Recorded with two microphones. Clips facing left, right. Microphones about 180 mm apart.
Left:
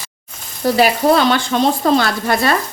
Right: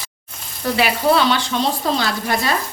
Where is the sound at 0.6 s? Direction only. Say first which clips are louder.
Left 4 dB; 40° left (ahead or behind).